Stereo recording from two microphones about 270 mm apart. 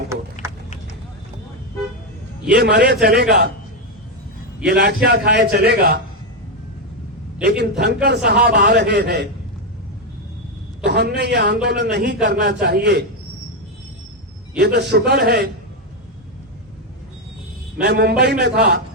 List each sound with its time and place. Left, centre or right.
0.4 s a sound: centre
2.5 s a man's voice: right
4.6 s a man's voice: right
7.4 s a man's voice: right
10.8 s a man's voice: right
14.6 s a man's voice: right
17.8 s a man's voice: right